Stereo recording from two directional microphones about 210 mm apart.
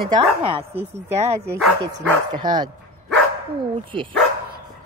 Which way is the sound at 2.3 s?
20° right (ahead or behind).